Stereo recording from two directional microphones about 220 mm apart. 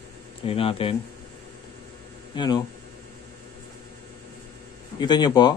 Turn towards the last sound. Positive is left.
turn(degrees=20)  # may be behind; listen again after turning